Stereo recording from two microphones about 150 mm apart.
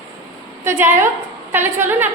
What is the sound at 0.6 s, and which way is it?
A woman's voice, 15° right (ahead or behind).